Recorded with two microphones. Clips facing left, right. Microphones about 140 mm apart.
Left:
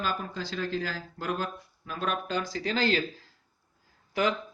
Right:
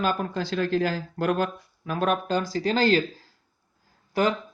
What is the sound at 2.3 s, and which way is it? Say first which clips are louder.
Speech: right 6 dB; 35° right (ahead or behind).